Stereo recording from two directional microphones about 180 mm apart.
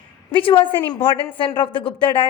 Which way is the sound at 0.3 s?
30° left (ahead or behind).